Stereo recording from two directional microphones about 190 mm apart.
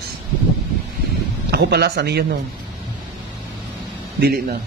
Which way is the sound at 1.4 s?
60° right (ahead or behind).